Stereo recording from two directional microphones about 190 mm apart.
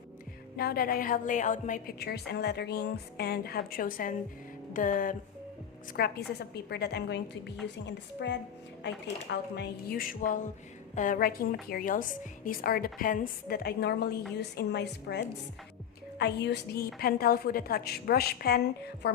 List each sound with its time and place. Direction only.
0.5 s a woman's voice: 55° left (ahead or behind)
2.0 s a woman's voice: 60° left (ahead or behind)
4.7 s music: 45° left (ahead or behind)
6.0 s a woman's voice: 60° left (ahead or behind)